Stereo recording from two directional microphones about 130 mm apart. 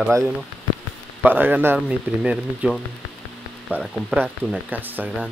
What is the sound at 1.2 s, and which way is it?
Speech, 15° right (ahead or behind).